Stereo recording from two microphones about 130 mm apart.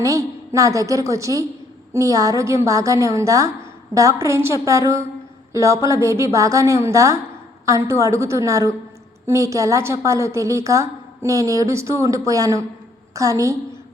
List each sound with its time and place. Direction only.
0.0 s a woman's voice: 25° right (ahead or behind)